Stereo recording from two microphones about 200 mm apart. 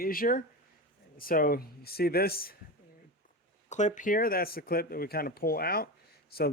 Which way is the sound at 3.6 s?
35° left (ahead or behind).